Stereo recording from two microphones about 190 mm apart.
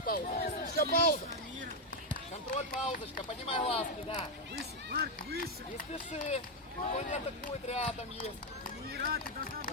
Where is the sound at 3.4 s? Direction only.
30° left (ahead or behind).